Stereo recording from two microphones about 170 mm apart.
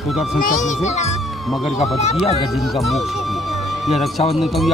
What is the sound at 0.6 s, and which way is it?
Speech, 45° left (ahead or behind).